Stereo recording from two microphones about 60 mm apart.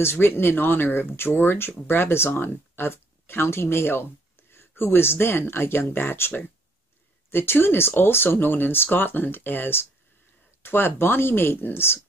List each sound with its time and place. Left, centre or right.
0.0 s speech: left